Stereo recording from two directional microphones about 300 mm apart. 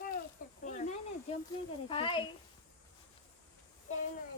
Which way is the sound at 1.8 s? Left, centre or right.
Centre.